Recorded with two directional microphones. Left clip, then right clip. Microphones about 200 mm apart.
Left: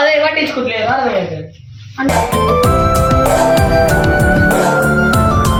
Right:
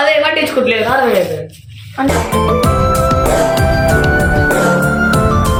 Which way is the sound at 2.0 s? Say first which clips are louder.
Left 1 dB; centre (ahead or behind).